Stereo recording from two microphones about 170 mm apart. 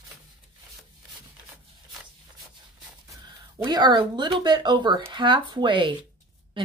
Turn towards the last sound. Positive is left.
turn(degrees=-30)  # may be behind; listen again after turning